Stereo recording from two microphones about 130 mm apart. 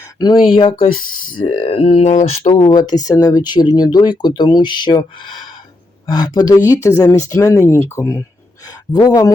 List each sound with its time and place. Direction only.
0.2 s speech: 30° left (ahead or behind)
1.5 s mantra: 60° left (ahead or behind)
2.6 s speech: 30° left (ahead or behind)